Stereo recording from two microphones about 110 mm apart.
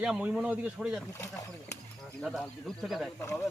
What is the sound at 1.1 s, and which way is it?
Speech, 25° left (ahead or behind).